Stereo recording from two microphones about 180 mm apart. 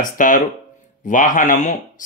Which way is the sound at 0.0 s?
45° left (ahead or behind).